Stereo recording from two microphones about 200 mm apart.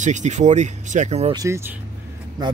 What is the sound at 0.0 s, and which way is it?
Speech, 35° right (ahead or behind).